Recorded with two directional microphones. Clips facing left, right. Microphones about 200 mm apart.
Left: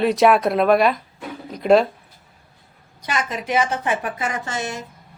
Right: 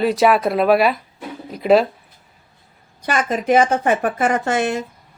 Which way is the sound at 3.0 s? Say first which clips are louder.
Right 6 dB; 50° right (ahead or behind).